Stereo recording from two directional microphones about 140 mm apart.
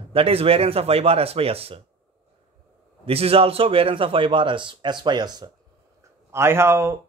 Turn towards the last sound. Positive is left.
turn(degrees=-20)  # may be behind; listen again after turning